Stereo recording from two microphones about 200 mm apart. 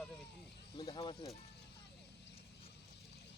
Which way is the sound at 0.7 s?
25° left (ahead or behind).